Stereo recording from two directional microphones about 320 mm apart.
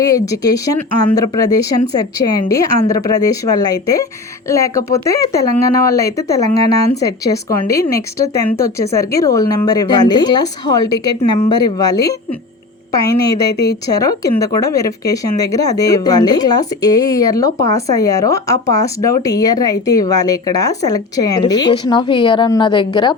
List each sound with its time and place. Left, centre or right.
0.0 s speech: centre
13.5 s speech: left
13.8 s speech: centre